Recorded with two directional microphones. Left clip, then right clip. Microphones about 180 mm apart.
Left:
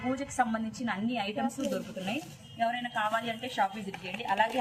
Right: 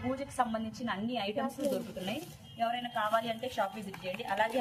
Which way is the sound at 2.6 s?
10° right (ahead or behind).